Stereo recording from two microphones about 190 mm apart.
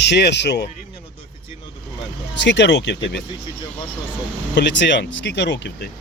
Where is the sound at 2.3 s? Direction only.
70° left (ahead or behind).